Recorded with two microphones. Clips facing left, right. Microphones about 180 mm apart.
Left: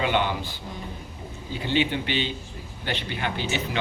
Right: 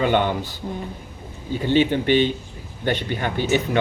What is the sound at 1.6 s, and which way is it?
Speech, 45° right (ahead or behind).